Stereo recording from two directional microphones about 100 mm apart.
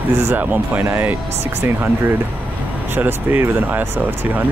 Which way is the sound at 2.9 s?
20° right (ahead or behind).